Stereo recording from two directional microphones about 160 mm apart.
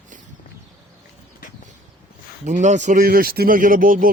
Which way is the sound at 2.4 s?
50° right (ahead or behind).